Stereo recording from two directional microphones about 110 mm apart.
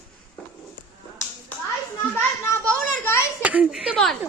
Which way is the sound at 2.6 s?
5° left (ahead or behind).